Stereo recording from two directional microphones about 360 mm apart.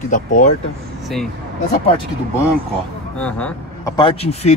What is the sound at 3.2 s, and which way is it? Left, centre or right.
Speech, centre.